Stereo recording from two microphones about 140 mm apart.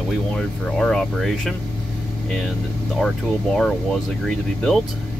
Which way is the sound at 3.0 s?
5° left (ahead or behind).